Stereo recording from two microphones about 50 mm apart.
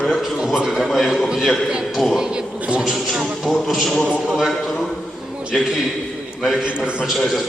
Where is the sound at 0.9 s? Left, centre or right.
Centre.